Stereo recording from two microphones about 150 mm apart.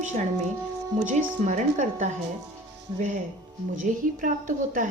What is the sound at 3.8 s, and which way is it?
A woman's voice, 65° right (ahead or behind).